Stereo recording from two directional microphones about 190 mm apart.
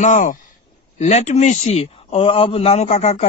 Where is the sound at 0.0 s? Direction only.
40° left (ahead or behind).